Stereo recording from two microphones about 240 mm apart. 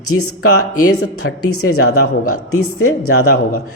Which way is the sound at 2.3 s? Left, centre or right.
Left.